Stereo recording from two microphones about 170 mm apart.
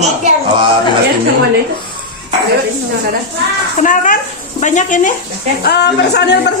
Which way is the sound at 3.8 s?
50° left (ahead or behind).